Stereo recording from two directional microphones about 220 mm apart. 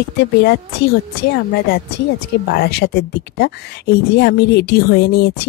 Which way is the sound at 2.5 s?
50° left (ahead or behind).